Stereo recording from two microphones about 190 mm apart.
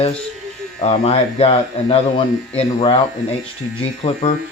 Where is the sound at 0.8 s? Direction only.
30° left (ahead or behind).